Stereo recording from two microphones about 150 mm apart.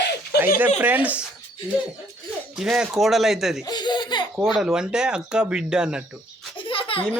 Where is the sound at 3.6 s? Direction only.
30° left (ahead or behind).